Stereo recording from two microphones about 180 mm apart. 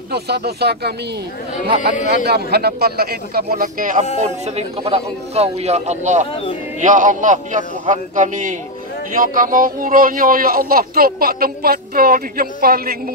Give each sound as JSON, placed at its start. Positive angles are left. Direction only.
{"t": 0.1, "sound": "a man's voice", "side_deg": -65}
{"t": 2.0, "sound": "a man's voice", "side_deg": -65}
{"t": 4.2, "sound": "a man's voice", "side_deg": -35}